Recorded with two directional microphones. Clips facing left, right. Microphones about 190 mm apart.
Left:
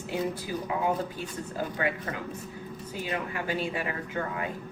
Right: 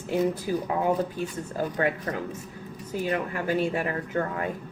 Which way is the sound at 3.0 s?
45° right (ahead or behind).